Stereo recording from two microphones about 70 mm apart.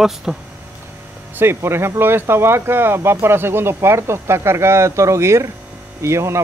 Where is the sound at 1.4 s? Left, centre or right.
Right.